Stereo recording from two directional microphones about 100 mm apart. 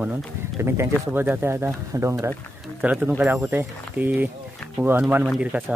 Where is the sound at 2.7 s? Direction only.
15° right (ahead or behind).